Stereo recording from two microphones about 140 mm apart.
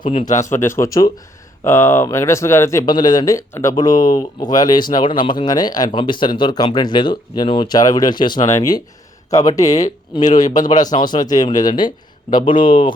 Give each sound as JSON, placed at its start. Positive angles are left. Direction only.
{"t": 0.0, "sound": "speech", "side_deg": 40}
{"t": 0.5, "sound": "speech", "side_deg": 20}
{"t": 2.8, "sound": "speech", "side_deg": 30}